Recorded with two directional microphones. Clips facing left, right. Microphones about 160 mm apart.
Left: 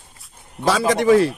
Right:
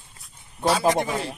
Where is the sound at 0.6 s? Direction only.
90° left.